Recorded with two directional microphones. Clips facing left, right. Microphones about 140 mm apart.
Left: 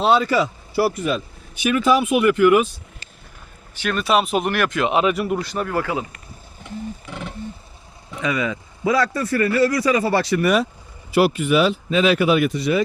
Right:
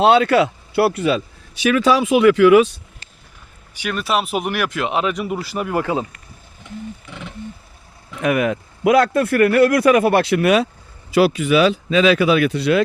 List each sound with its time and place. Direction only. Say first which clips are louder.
0.0 s speech: right 4 dB; 70° right (ahead or behind); by 2.7 s 90° right
3.8 s speech: left 2 dB; 10° right (ahead or behind); by 6.1 s 25° right (ahead or behind)
7.1 s vehicle: left 3 dB; 45° left (ahead or behind)
8.2 s speech: right 5 dB; 60° right (ahead or behind)
11.1 s speech: right 2 dB; 90° right; by 12.8 s 70° right (ahead or behind)